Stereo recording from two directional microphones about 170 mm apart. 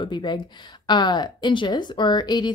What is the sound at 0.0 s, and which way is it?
A woman's voice, 25° left (ahead or behind).